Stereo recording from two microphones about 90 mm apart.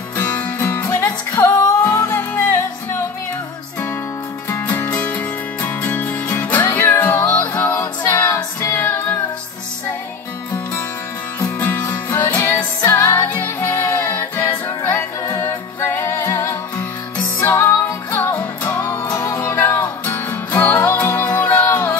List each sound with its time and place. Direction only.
0.2 s music: 20° left (ahead or behind)
0.8 s music: 30° left (ahead or behind)
4.6 s music: 20° left (ahead or behind)
11.8 s music: 35° left (ahead or behind)